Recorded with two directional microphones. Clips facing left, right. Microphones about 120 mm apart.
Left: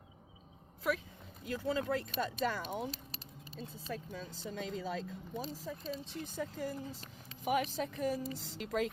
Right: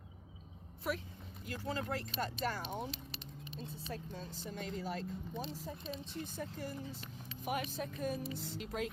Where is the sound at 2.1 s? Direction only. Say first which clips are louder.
Left 3 dB; 50° left (ahead or behind).